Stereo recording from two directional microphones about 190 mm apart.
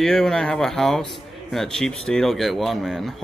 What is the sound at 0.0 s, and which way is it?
A man's voice, centre (ahead or behind).